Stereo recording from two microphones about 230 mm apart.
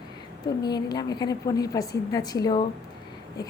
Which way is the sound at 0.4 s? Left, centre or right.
Centre.